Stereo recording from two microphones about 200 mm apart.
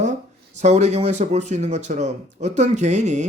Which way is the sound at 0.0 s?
35° right (ahead or behind).